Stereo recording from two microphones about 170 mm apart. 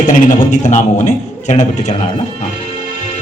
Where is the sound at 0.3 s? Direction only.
45° left (ahead or behind).